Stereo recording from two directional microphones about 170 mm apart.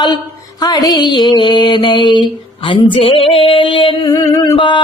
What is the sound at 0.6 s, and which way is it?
Mantra, 20° left (ahead or behind).